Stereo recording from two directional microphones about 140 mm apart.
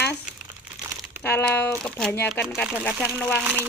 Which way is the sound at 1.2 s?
15° left (ahead or behind).